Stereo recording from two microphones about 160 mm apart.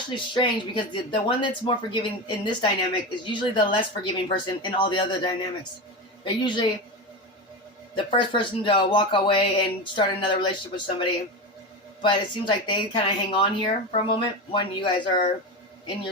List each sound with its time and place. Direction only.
0.3 s a woman's voice: 30° left (ahead or behind)
7.9 s speech: 30° left (ahead or behind)